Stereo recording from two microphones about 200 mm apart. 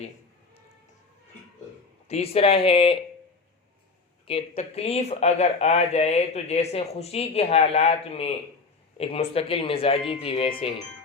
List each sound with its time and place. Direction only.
2.0 s speech: 30° left (ahead or behind)
4.3 s speech: 30° left (ahead or behind)